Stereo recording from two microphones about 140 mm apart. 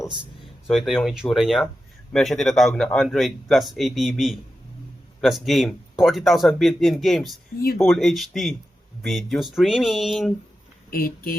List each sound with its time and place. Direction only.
0.7 s speech: 5° right (ahead or behind)
10.9 s speech: 90° left